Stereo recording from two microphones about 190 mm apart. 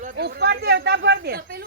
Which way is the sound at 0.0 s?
50° right (ahead or behind).